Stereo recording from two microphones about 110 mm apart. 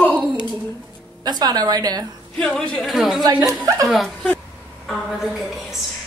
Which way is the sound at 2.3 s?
10° left (ahead or behind).